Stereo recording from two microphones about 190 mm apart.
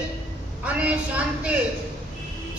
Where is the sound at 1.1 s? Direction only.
5° right (ahead or behind).